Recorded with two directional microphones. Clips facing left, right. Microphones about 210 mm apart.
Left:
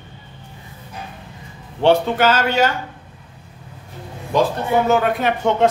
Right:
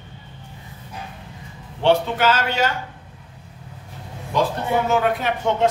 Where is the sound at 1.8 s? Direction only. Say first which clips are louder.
Left 3 dB; 45° left (ahead or behind).